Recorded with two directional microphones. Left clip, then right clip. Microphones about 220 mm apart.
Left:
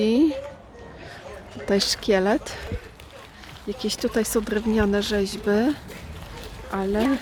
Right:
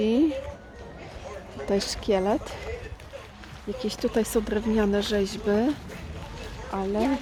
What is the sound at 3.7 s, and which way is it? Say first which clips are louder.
Speech: left 2 dB; 15° left (ahead or behind).